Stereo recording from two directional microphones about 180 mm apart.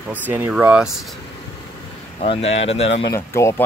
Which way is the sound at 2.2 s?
35° left (ahead or behind).